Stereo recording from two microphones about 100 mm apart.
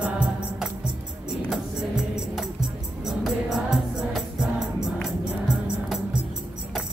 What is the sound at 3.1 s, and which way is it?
Music, centre (ahead or behind).